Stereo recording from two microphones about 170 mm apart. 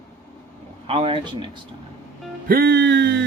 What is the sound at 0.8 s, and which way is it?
Speech, 35° right (ahead or behind).